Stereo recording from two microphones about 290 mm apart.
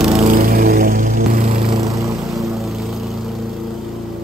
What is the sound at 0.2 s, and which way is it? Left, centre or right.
Music, right.